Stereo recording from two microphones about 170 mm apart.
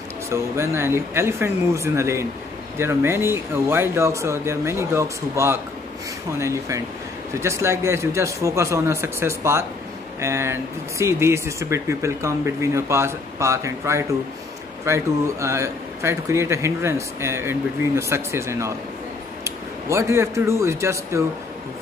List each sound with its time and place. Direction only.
0.3 s speech: 15° right (ahead or behind)